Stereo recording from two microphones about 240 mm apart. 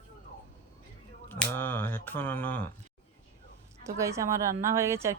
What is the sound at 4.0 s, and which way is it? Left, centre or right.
Speech, centre.